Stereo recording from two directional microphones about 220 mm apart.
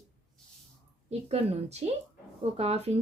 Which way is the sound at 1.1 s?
30° right (ahead or behind).